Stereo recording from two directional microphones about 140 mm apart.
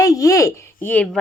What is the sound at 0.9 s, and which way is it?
Speech, 10° left (ahead or behind).